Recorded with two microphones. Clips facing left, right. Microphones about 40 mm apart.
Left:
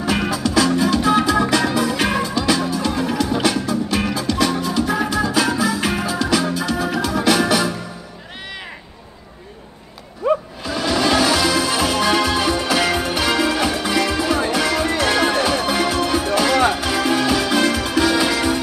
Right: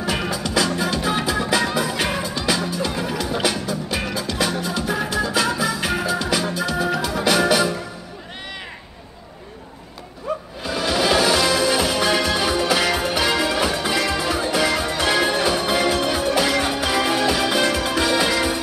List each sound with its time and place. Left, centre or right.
0.0 s music: centre
10.3 s music: left
10.6 s music: centre